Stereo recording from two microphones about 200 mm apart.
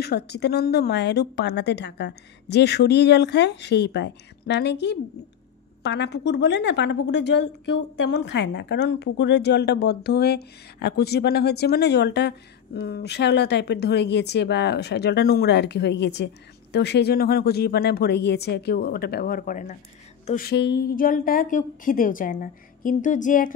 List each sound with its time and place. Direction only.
0.0 s a woman's voice: 55° left (ahead or behind); by 19.8 s 40° left (ahead or behind)
20.2 s a sound: 45° left (ahead or behind)
20.5 s speech: 55° left (ahead or behind); by 23.5 s 40° left (ahead or behind)